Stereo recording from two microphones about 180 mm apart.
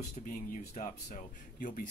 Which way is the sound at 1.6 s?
50° left (ahead or behind).